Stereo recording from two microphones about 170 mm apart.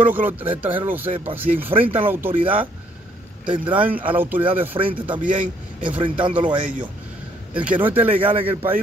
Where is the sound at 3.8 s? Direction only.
10° right (ahead or behind).